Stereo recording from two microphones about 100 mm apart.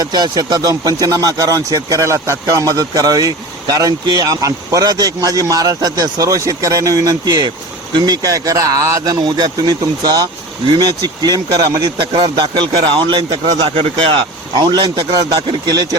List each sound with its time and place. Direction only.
0.0 s speech: 40° right (ahead or behind)
9.4 s a man's voice: 45° right (ahead or behind); by 14.2 s 65° right (ahead or behind)
14.5 s a man's voice: 50° right (ahead or behind)